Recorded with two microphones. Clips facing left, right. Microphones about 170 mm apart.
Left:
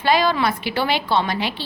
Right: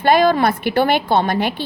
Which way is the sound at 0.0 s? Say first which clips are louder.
Right 5 dB; 50° right (ahead or behind).